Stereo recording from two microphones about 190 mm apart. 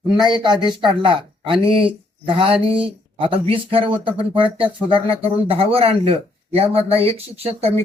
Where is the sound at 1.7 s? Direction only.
30° right (ahead or behind).